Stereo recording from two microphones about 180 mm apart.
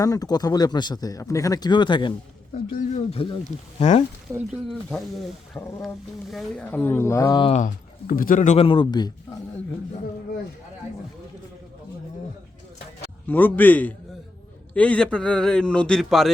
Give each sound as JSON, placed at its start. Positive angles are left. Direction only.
{"t": 0.0, "sound": "speech", "side_deg": 20}
{"t": 2.7, "sound": "speech", "side_deg": 35}
{"t": 4.3, "sound": "speech", "side_deg": -15}
{"t": 4.7, "sound": "a man's voice", "side_deg": 0}
{"t": 5.5, "sound": "a woman's voice", "side_deg": 10}
{"t": 7.5, "sound": "speech", "side_deg": 50}
{"t": 13.2, "sound": "a woman's voice", "side_deg": 10}